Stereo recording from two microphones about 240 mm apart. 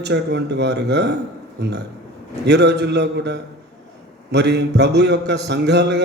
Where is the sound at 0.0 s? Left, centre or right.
Right.